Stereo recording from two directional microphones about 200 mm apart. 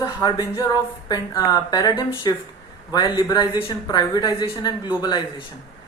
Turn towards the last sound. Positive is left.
turn(degrees=20)  # may be behind; listen again after turning